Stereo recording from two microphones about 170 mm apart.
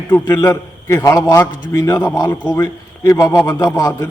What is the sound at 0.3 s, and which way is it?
A man's voice, 25° left (ahead or behind).